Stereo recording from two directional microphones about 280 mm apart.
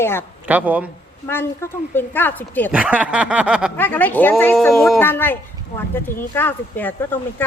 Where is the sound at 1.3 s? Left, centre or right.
Centre.